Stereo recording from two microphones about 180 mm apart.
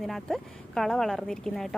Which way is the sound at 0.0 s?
Centre (ahead or behind).